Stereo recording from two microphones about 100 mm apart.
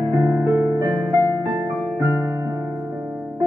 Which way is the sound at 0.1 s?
35° right (ahead or behind).